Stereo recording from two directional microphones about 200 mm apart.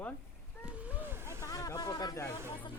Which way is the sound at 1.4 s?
15° left (ahead or behind).